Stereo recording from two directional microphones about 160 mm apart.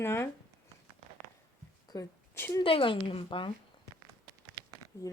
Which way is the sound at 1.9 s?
20° left (ahead or behind).